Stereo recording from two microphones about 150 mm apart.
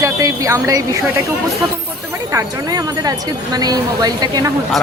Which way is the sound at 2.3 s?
20° right (ahead or behind).